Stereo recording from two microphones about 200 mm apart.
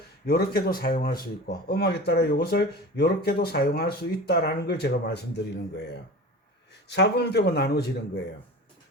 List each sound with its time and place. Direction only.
0.3 s speech: 50° left (ahead or behind)